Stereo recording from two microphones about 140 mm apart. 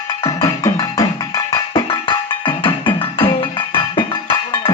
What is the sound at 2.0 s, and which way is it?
Music, 35° left (ahead or behind).